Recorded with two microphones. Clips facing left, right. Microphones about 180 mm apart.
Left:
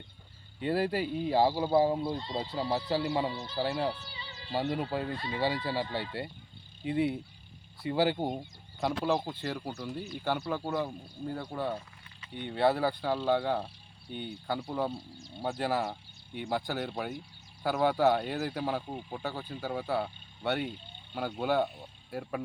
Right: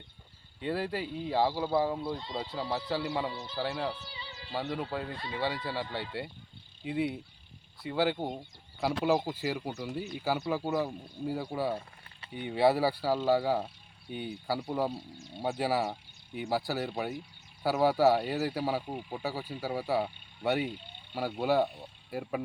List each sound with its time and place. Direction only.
0.6 s speech: 5° left (ahead or behind)
2.5 s speech: 10° left (ahead or behind)
3.1 s speech: 30° left (ahead or behind)
3.3 s speech: 10° left (ahead or behind)
8.8 s speech: 5° right (ahead or behind)
15.5 s speech: 10° right (ahead or behind)